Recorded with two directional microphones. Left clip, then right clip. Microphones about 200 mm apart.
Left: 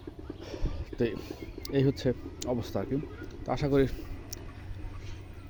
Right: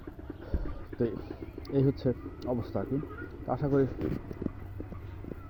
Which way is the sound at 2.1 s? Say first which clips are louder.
Left 1 dB; 15° left (ahead or behind).